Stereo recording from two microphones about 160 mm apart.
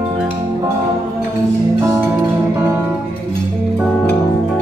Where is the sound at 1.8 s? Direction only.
15° right (ahead or behind).